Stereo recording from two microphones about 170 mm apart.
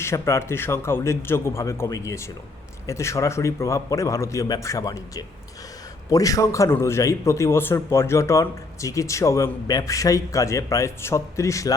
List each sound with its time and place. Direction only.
0.0 s a man's voice: 15° left (ahead or behind)